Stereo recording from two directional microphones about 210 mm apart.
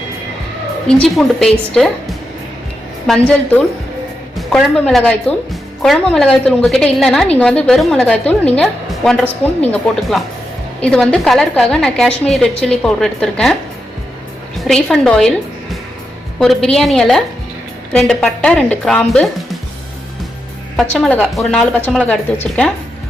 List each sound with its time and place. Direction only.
0.9 s a woman's voice: 5° left (ahead or behind)
3.1 s a woman's voice: 5° left (ahead or behind)
4.4 s a woman's voice: centre (ahead or behind)
14.6 s a woman's voice: 5° left (ahead or behind)
20.7 s a woman's voice: 5° left (ahead or behind)